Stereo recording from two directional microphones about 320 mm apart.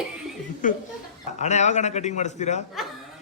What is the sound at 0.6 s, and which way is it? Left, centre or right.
A man's voice, left.